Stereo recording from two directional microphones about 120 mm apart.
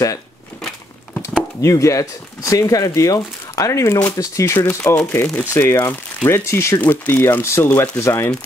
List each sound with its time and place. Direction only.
1.6 s speech: 25° left (ahead or behind)